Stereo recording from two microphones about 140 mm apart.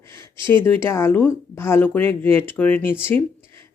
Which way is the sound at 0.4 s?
15° left (ahead or behind).